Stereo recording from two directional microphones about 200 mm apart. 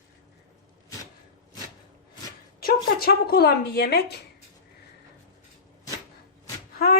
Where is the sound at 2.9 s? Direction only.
50° left (ahead or behind).